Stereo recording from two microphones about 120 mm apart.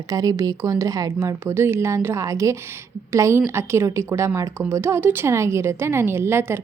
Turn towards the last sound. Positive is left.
turn(degrees=-20)  # may be behind; listen again after turning